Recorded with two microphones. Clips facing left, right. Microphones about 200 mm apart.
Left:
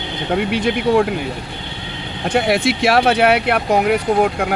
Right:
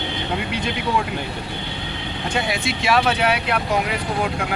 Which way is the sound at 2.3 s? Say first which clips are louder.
Left 9 dB; 70° left (ahead or behind).